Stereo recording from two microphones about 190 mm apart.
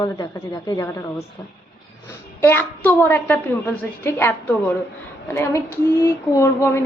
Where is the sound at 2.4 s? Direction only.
10° left (ahead or behind).